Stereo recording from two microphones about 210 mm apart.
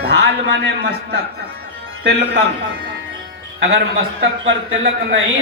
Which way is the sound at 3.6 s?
55° right (ahead or behind).